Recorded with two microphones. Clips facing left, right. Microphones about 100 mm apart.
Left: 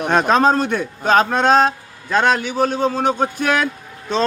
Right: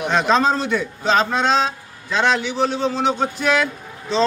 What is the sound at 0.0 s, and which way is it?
A man's voice, 50° left (ahead or behind).